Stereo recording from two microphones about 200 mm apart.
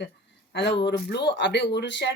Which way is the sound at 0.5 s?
60° left (ahead or behind).